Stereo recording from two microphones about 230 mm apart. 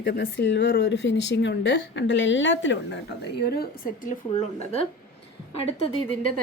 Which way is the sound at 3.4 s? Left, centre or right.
Left.